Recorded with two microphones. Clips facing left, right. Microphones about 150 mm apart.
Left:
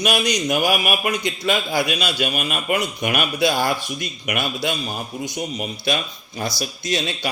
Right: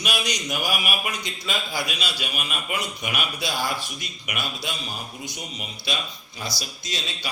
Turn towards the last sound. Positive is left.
turn(degrees=55)  # may be behind; listen again after turning